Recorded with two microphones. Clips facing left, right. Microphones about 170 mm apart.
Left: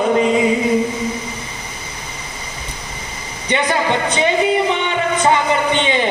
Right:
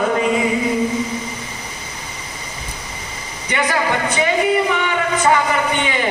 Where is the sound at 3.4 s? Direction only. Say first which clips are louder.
Left 2 dB; 20° left (ahead or behind).